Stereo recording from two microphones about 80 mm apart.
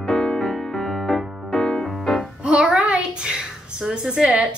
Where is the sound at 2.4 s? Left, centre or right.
Centre.